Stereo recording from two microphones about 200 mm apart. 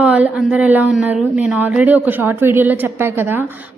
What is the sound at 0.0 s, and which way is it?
Speech, 5° right (ahead or behind).